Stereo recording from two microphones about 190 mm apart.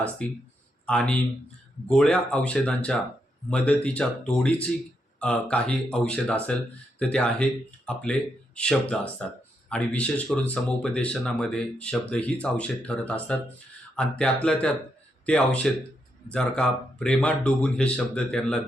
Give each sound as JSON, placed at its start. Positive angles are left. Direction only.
{"t": 0.2, "sound": "speech", "side_deg": 5}
{"t": 15.3, "sound": "speech", "side_deg": 5}